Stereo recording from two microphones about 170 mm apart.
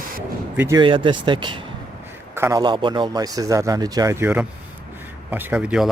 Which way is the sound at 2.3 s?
15° right (ahead or behind).